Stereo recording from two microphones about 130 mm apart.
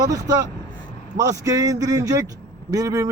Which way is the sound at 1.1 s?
25° right (ahead or behind).